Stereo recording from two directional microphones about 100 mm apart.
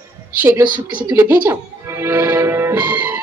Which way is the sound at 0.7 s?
50° right (ahead or behind).